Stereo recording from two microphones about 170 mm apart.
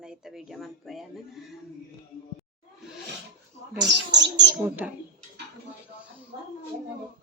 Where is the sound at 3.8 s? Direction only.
90° right.